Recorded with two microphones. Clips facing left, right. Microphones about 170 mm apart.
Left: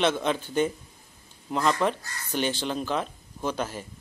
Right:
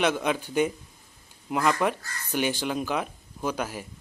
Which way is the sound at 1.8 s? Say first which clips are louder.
Even; 10° right (ahead or behind).